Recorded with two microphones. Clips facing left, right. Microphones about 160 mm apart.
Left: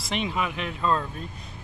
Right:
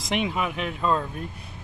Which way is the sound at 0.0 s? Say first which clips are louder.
Right 2 dB; 10° right (ahead or behind).